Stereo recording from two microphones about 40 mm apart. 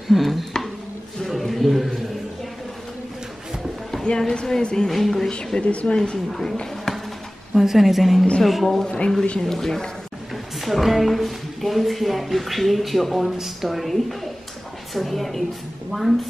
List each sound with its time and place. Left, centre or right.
0.1 s a woman's voice: centre
1.4 s a sound: centre
4.3 s speech: centre
4.8 s speech: centre
5.3 s speech: left
6.6 s a sound: centre
7.5 s a woman's voice: centre
8.8 s speech: left
9.4 s speech: centre
10.3 s a woman's voice: centre